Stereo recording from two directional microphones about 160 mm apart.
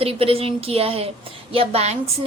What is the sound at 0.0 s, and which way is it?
A woman's voice, 35° right (ahead or behind).